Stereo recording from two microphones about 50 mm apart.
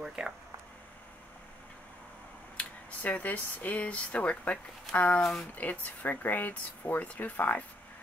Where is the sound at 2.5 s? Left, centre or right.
Left.